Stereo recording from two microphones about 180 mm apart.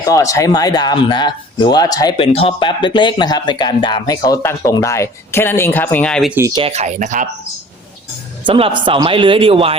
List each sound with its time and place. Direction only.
0.0 s speech: 20° left (ahead or behind)
6.5 s speech: 30° right (ahead or behind)
8.4 s speech: 30° right (ahead or behind)